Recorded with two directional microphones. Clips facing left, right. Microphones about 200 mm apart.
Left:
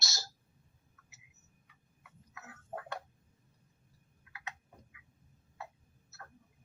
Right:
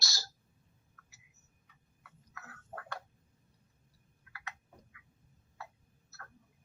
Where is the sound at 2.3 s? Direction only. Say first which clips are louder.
Left 4 dB; 20° left (ahead or behind).